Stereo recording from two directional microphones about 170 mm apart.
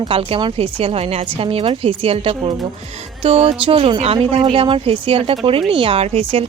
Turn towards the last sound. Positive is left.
turn(degrees=-35)  # may be behind; listen again after turning